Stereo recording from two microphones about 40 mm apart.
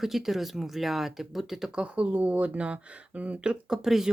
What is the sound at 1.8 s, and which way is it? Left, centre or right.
Speech, right.